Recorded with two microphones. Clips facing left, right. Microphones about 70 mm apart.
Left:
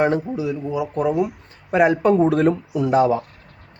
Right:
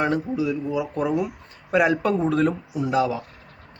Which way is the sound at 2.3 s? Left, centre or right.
Left.